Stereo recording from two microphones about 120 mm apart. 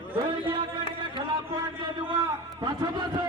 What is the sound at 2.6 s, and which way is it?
Speech, 35° right (ahead or behind).